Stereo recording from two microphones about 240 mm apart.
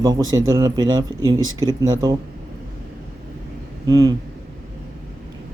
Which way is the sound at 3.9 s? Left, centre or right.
Centre.